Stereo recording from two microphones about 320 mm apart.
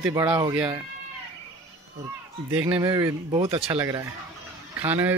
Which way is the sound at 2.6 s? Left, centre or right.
Centre.